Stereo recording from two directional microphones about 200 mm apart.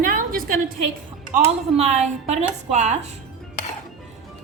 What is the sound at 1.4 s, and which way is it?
A woman's voice, 35° right (ahead or behind).